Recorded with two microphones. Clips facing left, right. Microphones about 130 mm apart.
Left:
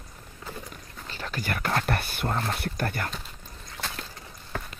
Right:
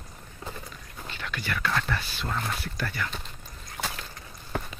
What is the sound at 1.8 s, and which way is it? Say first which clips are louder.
Speech: left 3 dB; 55° left (ahead or behind).